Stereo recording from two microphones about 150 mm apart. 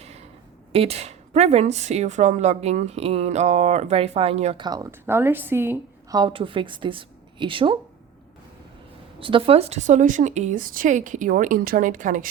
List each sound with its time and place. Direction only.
0.0 s a sound: 45° right (ahead or behind)
0.7 s speech: 40° right (ahead or behind)
4.6 s a woman's voice: 25° right (ahead or behind)
6.1 s a woman's voice: 35° right (ahead or behind)
9.2 s a woman's voice: 35° right (ahead or behind); by 12.3 s 60° right (ahead or behind)